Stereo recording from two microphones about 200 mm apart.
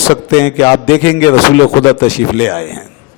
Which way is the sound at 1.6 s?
30° left (ahead or behind).